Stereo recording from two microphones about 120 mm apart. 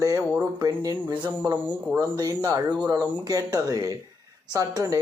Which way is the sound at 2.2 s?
30° right (ahead or behind).